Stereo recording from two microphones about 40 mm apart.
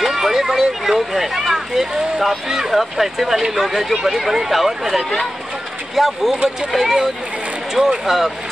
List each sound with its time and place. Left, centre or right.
0.0 s a sound: centre
2.4 s speech: centre
6.3 s speech: right
6.7 s speech: centre